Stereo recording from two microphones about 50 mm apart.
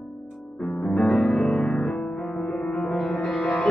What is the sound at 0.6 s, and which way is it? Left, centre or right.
Music, centre.